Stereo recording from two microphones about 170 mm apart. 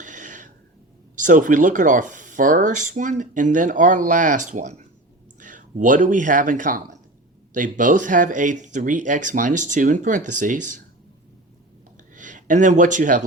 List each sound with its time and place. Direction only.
0.0 s a sound: 50° right (ahead or behind)
1.1 s speech: 50° right (ahead or behind)
12.1 s speech: 50° right (ahead or behind)